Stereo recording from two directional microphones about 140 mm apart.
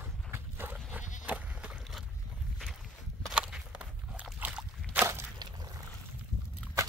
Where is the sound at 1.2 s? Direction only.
10° right (ahead or behind).